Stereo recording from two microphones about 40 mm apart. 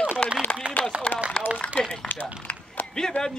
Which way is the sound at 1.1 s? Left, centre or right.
Left.